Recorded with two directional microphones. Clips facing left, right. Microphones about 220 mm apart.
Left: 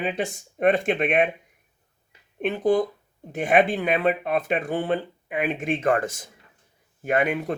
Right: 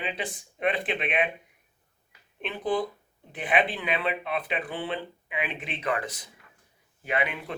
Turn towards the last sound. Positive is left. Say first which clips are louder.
# left 7 dB
turn(degrees=45)  # may be behind; listen again after turning